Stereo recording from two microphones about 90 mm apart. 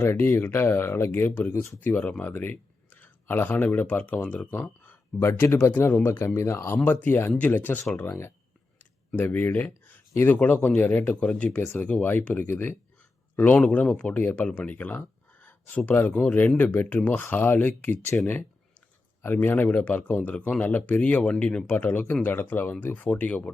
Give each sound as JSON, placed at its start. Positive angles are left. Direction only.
{"t": 0.0, "sound": "speech", "side_deg": 25}
{"t": 1.8, "sound": "speech", "side_deg": 20}
{"t": 14.2, "sound": "speech", "side_deg": 25}
{"t": 14.4, "sound": "speech", "side_deg": 15}
{"t": 19.2, "sound": "speech", "side_deg": 20}